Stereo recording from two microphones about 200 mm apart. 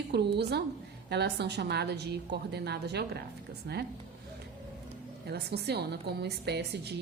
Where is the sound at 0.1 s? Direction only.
55° right (ahead or behind).